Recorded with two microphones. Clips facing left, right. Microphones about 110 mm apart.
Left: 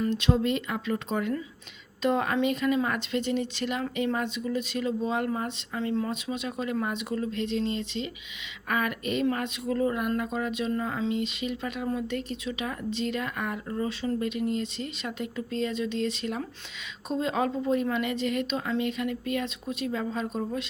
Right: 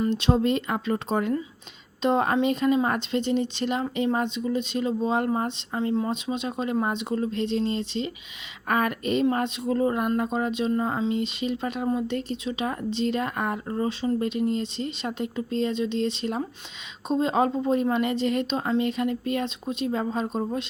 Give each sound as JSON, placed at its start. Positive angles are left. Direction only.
{"t": 0.0, "sound": "speech", "side_deg": -30}